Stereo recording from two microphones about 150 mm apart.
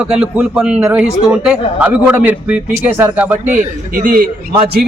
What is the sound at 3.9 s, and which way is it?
Speech, 65° right (ahead or behind).